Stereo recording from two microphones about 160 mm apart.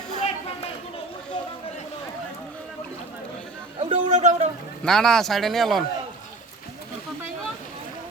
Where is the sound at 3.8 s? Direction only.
45° right (ahead or behind).